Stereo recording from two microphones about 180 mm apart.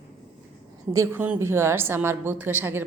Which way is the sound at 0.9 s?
15° right (ahead or behind).